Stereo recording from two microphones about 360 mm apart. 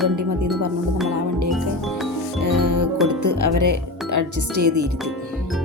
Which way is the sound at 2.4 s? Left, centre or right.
Right.